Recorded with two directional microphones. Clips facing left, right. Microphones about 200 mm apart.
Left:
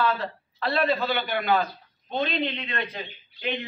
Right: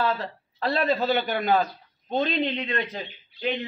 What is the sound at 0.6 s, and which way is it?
A man's voice, 40° right (ahead or behind).